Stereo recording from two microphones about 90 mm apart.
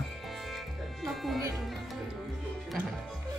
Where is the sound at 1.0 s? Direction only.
Centre (ahead or behind).